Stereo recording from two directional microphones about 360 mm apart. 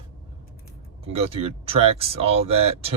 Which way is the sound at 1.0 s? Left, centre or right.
Centre.